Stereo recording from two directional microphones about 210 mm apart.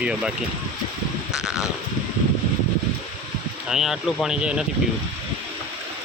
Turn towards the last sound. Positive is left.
turn(degrees=-5)  # may be behind; listen again after turning